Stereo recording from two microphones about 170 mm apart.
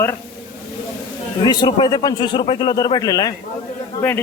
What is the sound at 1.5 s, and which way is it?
A man's voice, 25° left (ahead or behind).